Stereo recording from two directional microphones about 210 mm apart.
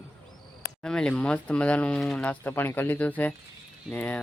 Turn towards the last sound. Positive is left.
turn(degrees=5)  # may be behind; listen again after turning